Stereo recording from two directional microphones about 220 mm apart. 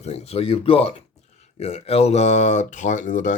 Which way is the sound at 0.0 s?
30° left (ahead or behind).